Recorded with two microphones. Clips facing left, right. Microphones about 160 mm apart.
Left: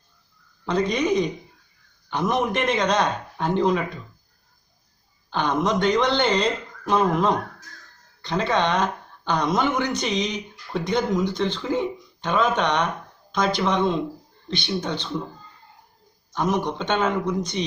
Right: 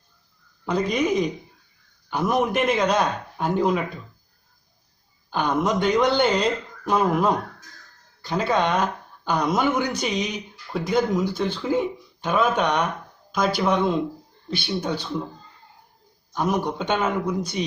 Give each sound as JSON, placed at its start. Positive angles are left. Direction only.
{"t": 0.6, "sound": "speech", "side_deg": -5}
{"t": 5.3, "sound": "speech", "side_deg": -10}
{"t": 16.3, "sound": "speech", "side_deg": -10}